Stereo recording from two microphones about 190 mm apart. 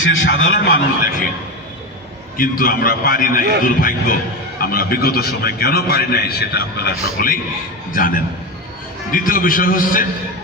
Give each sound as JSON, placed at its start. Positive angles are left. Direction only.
{"t": 0.6, "sound": "a man's voice", "side_deg": 50}
{"t": 2.4, "sound": "a man's voice", "side_deg": 50}